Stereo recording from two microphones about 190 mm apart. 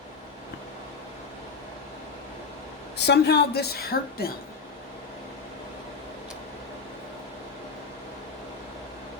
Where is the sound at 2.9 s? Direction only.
60° left (ahead or behind).